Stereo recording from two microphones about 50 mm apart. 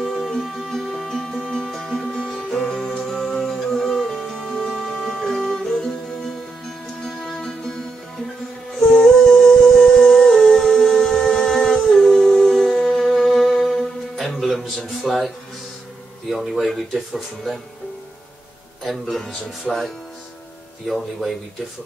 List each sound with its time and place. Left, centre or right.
0.0 s music: centre
9.0 s humming: centre
12.2 s music: centre
16.3 s speech: centre
18.9 s speech: centre